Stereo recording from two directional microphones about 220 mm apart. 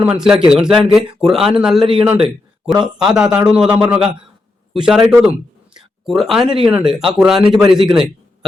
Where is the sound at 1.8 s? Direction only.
25° right (ahead or behind).